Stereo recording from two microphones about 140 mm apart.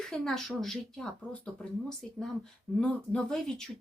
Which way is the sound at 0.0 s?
5° left (ahead or behind).